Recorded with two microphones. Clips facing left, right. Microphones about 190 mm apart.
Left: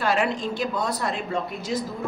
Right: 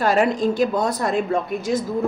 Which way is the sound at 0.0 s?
40° right (ahead or behind).